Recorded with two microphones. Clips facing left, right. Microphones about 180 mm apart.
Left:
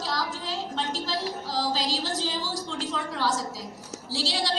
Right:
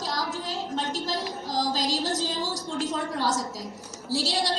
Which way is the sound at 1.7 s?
45° right (ahead or behind).